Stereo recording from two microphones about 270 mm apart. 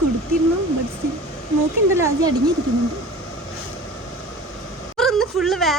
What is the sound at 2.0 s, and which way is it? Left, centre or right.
Speech, centre.